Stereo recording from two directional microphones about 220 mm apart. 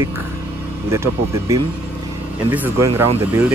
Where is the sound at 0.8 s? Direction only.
10° right (ahead or behind).